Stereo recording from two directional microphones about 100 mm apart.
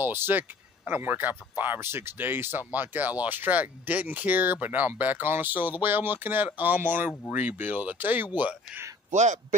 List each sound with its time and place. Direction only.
0.0 s speech: 20° right (ahead or behind)